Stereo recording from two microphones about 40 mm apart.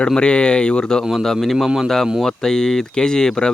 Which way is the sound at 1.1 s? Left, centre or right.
Centre.